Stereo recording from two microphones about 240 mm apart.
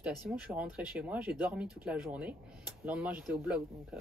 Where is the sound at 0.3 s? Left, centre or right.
Centre.